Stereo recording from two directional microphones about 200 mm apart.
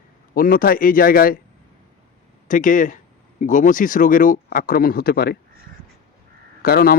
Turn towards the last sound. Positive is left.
turn(degrees=50)  # may be behind; listen again after turning